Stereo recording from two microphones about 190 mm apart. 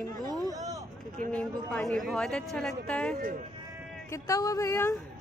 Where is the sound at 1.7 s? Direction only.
Centre (ahead or behind).